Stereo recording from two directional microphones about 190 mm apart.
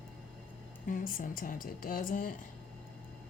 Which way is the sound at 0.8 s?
45° left (ahead or behind).